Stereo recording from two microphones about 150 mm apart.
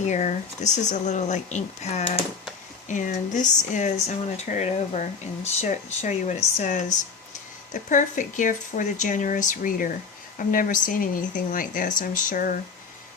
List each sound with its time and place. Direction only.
0.0 s speech: 50° left (ahead or behind); by 12.5 s 70° left (ahead or behind)